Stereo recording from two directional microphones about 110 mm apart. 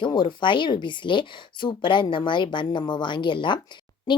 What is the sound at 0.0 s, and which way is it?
Speech, 45° left (ahead or behind).